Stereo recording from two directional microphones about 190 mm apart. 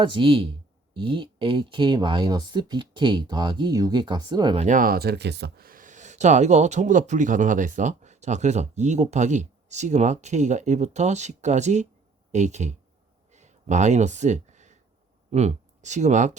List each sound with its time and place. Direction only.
0.0 s speech: 25° right (ahead or behind)
4.6 s speech: 45° right (ahead or behind)
13.3 s a sound: 40° right (ahead or behind)
15.3 s speech: 35° right (ahead or behind)